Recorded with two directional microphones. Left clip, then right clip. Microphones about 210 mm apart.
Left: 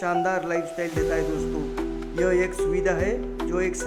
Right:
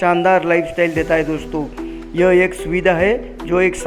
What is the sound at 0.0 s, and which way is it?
Speech, 35° right (ahead or behind).